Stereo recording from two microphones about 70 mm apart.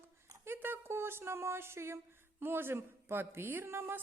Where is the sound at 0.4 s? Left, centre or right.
Right.